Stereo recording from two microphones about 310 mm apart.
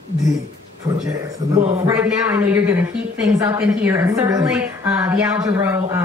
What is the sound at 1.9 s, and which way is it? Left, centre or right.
A woman's voice, centre.